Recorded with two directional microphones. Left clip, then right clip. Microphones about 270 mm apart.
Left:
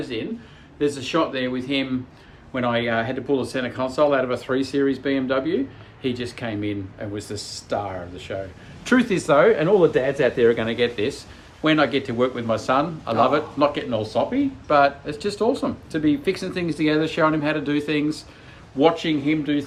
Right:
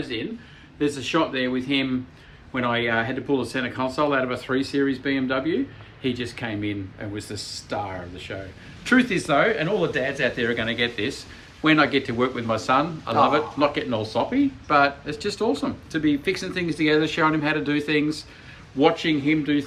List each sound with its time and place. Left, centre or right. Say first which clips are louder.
0.8 s speech: left 1 dB; centre